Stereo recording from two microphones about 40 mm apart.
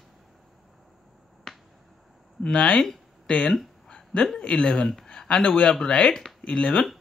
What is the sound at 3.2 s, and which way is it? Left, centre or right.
Speech, left.